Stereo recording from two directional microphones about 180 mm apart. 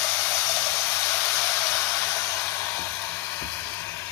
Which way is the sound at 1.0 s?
10° left (ahead or behind).